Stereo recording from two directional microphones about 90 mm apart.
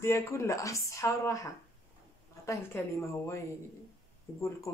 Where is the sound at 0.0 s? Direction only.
30° left (ahead or behind).